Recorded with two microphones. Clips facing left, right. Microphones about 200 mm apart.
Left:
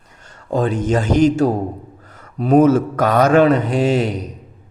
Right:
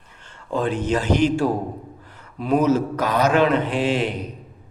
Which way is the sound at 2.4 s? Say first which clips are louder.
Left 6 dB; 45° left (ahead or behind).